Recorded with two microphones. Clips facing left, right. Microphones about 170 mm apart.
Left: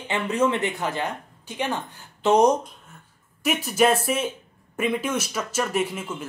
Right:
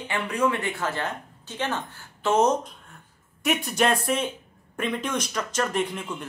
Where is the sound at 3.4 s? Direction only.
Centre (ahead or behind).